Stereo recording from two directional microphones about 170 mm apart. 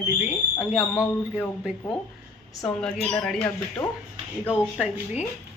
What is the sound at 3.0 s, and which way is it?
Speech, 5° left (ahead or behind).